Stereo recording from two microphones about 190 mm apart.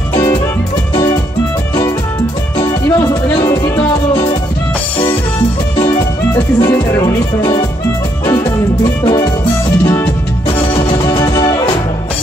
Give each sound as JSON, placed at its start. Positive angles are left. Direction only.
{"t": 0.1, "sound": "music", "side_deg": 25}
{"t": 2.6, "sound": "music", "side_deg": 15}
{"t": 4.1, "sound": "music", "side_deg": 25}
{"t": 6.3, "sound": "speech", "side_deg": 15}
{"t": 8.3, "sound": "music", "side_deg": 20}
{"t": 10.6, "sound": "music", "side_deg": 25}